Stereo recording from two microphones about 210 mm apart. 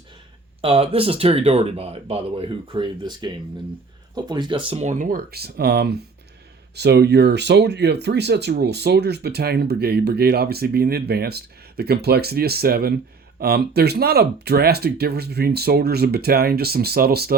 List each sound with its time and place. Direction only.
0.6 s speech: 25° right (ahead or behind); by 17.3 s 45° right (ahead or behind)